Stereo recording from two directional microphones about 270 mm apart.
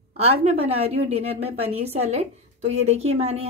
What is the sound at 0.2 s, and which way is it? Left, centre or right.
A woman's voice, right.